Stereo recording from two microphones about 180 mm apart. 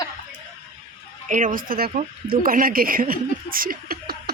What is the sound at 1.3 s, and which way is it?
Speech, 50° right (ahead or behind).